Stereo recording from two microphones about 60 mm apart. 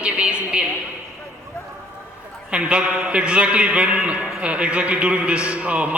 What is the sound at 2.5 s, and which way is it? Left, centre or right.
A man's voice, centre.